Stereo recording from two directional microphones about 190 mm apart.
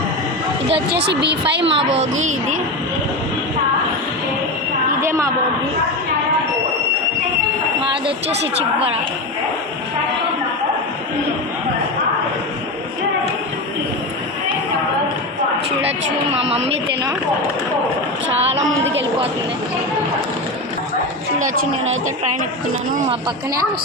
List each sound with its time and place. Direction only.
0.9 s a woman's voice: 65° right (ahead or behind)
1.7 s a child's voice: 35° right (ahead or behind)
4.9 s a sound: 15° right (ahead or behind)
16.3 s a child's voice: 30° right (ahead or behind)
21.3 s speech: 45° right (ahead or behind)